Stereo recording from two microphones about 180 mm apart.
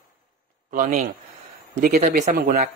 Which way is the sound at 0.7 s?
50° right (ahead or behind).